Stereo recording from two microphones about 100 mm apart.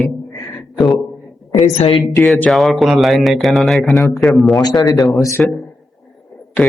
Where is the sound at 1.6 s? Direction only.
60° left (ahead or behind).